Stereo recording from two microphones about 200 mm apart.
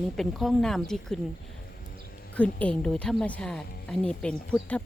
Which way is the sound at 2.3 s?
5° left (ahead or behind).